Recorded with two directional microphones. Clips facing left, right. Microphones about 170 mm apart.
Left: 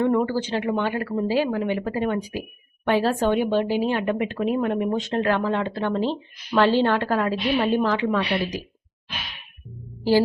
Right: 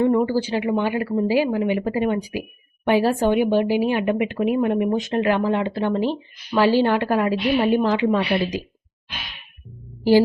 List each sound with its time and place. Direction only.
0.1 s speech: 10° right (ahead or behind)
10.0 s a woman's voice: 15° right (ahead or behind)